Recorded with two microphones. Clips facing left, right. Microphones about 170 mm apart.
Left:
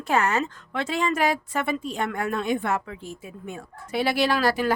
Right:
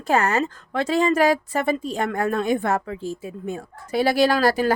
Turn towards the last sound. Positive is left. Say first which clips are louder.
# right 4 dB
turn(degrees=-40)  # may be behind; listen again after turning